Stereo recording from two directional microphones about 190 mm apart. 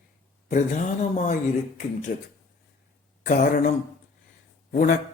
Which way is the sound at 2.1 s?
50° left (ahead or behind).